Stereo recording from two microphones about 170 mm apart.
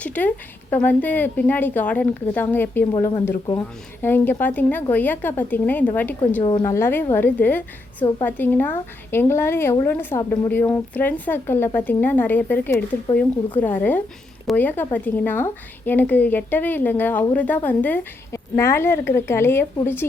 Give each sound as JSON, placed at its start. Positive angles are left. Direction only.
{"t": 0.0, "sound": "a woman's voice", "side_deg": 10}
{"t": 4.0, "sound": "a woman's voice", "side_deg": 10}
{"t": 6.4, "sound": "a woman's voice", "side_deg": 30}
{"t": 6.7, "sound": "a woman's voice", "side_deg": 15}